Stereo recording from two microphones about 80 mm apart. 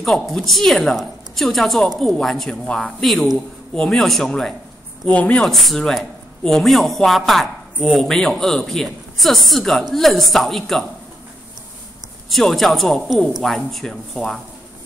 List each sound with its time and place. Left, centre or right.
0.0 s a man's voice: centre
5.0 s speech: centre
5.4 s a man's voice: centre
12.3 s a man's voice: centre